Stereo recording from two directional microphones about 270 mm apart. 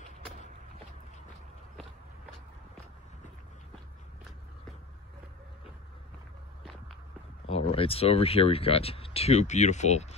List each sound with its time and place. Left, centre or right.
6.6 s walk: centre
7.4 s speech: left